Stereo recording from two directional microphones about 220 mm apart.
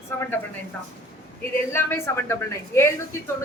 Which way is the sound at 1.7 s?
10° left (ahead or behind).